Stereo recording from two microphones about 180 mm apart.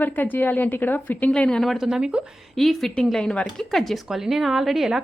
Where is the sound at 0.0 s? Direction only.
10° left (ahead or behind).